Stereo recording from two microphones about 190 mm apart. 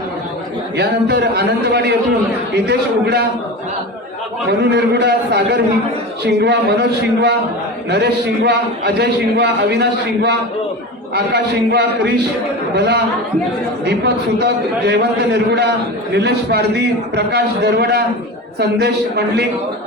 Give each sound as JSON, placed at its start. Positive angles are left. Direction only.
{"t": 0.8, "sound": "a man's voice", "side_deg": -60}
{"t": 4.7, "sound": "a man's voice", "side_deg": -60}